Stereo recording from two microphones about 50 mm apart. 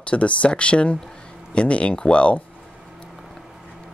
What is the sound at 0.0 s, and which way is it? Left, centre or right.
Speech, left.